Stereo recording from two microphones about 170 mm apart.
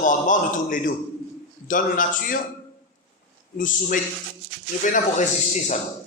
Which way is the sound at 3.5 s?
50° left (ahead or behind).